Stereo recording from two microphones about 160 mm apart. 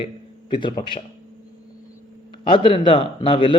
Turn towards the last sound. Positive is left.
turn(degrees=30)  # may be behind; listen again after turning